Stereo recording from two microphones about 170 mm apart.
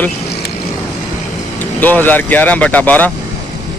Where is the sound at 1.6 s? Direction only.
10° left (ahead or behind).